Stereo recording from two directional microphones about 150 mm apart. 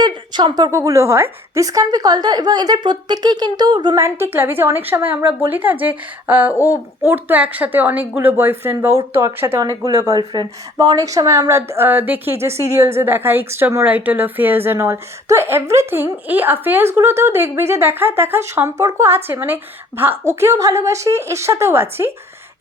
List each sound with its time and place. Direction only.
0.0 s a woman's voice: 30° right (ahead or behind)